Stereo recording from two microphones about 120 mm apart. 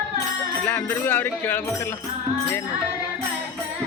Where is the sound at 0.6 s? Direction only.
15° left (ahead or behind).